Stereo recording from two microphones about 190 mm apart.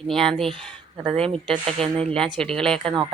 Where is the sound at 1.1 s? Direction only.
30° right (ahead or behind).